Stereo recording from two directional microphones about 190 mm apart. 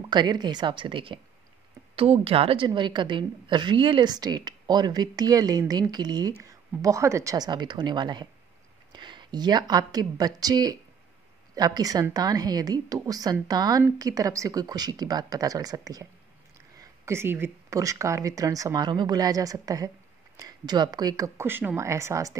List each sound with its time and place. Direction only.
0.1 s a woman's voice: 20° right (ahead or behind)